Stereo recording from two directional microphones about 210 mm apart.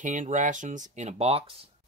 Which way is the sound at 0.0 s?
35° right (ahead or behind).